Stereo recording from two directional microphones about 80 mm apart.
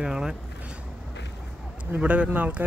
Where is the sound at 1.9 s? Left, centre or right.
Centre.